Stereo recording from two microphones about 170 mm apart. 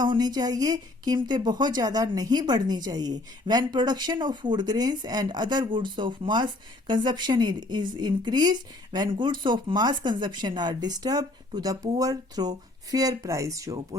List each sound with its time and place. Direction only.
0.0 s speech: 25° right (ahead or behind)